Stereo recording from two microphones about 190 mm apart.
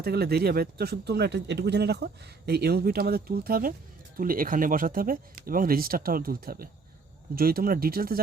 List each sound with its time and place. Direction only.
0.0 s speech: 55° right (ahead or behind)